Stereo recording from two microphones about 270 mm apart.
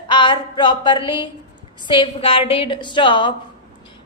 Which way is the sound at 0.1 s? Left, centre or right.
Centre.